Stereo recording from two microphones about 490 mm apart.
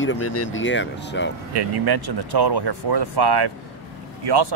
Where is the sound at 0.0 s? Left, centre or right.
Left.